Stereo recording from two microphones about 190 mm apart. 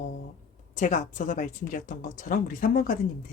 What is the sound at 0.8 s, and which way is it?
Speech, 40° left (ahead or behind).